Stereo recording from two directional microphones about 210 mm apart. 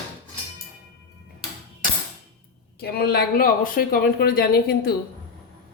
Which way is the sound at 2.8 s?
50° left (ahead or behind).